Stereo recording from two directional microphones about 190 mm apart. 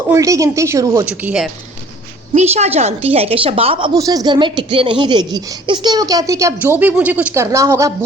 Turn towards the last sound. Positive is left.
turn(degrees=-15)  # may be behind; listen again after turning